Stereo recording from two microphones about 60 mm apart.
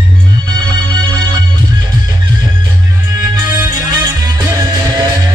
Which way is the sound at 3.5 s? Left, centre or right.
Right.